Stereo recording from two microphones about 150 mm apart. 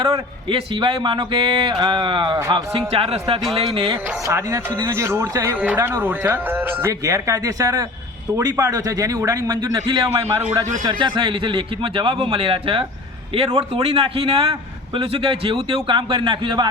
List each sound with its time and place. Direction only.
0.0 s a man's voice: 30° right (ahead or behind)
2.7 s speech: 40° right (ahead or behind)
3.9 s a man's voice: 20° right (ahead or behind)